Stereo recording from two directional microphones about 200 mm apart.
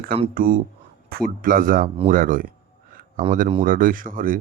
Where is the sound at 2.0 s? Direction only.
40° right (ahead or behind).